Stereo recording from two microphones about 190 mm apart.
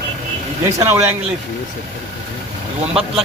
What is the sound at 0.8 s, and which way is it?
Speech, 15° right (ahead or behind).